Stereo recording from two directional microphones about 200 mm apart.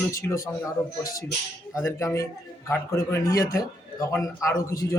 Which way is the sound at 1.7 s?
15° left (ahead or behind).